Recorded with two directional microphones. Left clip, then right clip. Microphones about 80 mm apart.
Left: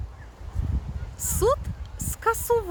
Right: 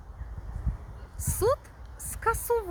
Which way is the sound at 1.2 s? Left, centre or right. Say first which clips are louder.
Left 3 dB; centre.